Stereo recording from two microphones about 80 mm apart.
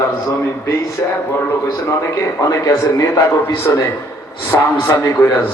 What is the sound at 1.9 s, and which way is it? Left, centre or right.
A man's voice, left.